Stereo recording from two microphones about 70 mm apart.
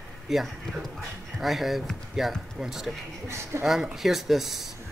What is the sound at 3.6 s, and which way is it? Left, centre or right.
Speech, centre.